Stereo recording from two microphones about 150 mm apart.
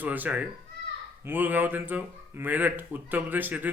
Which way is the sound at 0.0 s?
10° right (ahead or behind).